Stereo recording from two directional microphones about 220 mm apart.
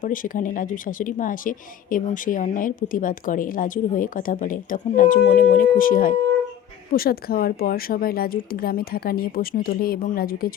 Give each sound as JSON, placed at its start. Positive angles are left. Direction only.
{"t": 0.0, "sound": "a woman's voice", "side_deg": 40}